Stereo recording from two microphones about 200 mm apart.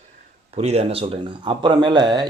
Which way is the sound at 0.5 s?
30° right (ahead or behind).